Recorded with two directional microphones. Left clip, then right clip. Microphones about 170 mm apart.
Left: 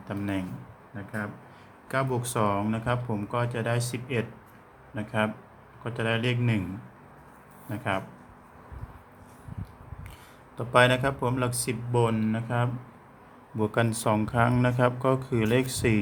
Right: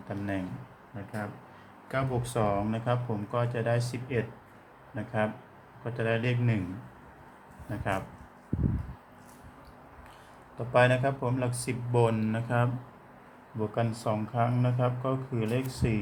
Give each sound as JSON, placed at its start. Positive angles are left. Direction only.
{"t": 0.1, "sound": "speech", "side_deg": 25}
{"t": 1.9, "sound": "speech", "side_deg": 30}
{"t": 7.7, "sound": "speech", "side_deg": 20}
{"t": 10.7, "sound": "speech", "side_deg": 30}
{"t": 11.9, "sound": "speech", "side_deg": 10}
{"t": 13.6, "sound": "speech", "side_deg": 45}